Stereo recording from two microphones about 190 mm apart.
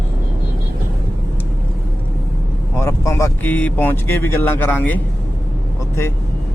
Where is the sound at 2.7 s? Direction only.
15° left (ahead or behind).